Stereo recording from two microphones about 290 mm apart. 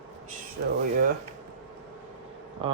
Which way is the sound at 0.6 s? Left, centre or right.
Right.